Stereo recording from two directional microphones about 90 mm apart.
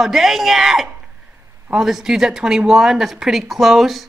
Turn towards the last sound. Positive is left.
turn(degrees=0)  # may be behind; listen again after turning